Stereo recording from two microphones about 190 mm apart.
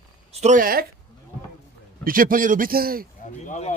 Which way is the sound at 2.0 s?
45° right (ahead or behind).